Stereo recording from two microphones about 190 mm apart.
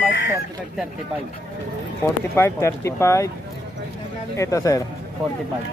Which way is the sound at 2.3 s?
15° left (ahead or behind).